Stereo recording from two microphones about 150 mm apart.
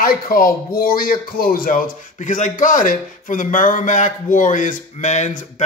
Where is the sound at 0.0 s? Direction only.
75° left (ahead or behind).